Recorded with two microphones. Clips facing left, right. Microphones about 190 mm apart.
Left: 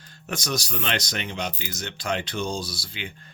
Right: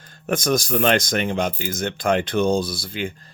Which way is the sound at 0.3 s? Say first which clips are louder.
Right 9 dB; 50° right (ahead or behind).